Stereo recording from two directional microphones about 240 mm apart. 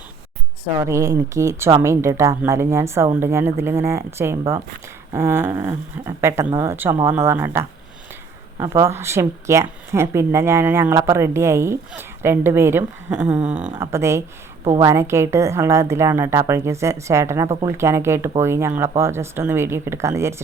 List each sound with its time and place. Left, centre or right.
0.8 s speech: centre